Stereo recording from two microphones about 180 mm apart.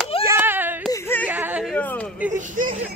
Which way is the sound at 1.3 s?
10° right (ahead or behind).